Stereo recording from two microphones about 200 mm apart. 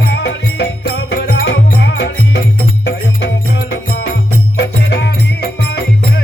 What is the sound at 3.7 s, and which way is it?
Music, 55° left (ahead or behind).